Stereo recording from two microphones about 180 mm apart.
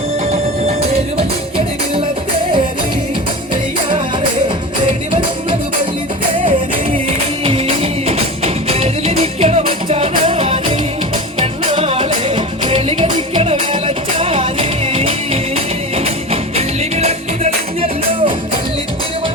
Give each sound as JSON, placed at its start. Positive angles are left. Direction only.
{"t": 7.4, "sound": "music", "side_deg": -30}